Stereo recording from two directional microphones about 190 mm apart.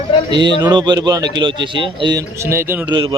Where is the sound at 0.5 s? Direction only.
20° right (ahead or behind).